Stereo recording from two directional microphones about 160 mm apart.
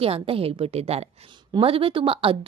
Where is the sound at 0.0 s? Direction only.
35° right (ahead or behind).